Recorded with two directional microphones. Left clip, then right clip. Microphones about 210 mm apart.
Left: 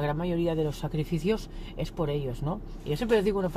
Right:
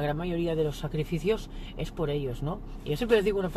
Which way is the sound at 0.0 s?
15° left (ahead or behind).